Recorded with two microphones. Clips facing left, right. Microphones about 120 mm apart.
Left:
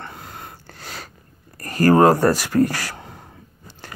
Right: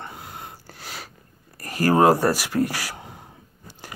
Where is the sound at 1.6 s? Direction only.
5° right (ahead or behind).